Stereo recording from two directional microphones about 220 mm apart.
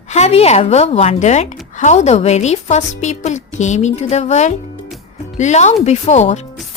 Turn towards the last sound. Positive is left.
turn(degrees=30)  # may be behind; listen again after turning